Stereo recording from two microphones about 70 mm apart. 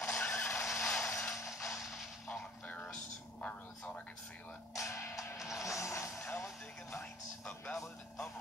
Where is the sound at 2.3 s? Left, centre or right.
Centre.